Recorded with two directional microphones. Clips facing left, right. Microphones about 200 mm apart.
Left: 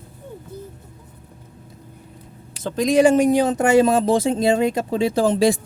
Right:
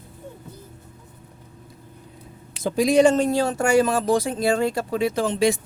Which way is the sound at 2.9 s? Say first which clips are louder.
Left 4 dB; 10° left (ahead or behind).